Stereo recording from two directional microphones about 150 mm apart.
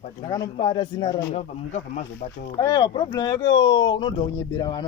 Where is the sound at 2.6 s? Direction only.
25° left (ahead or behind).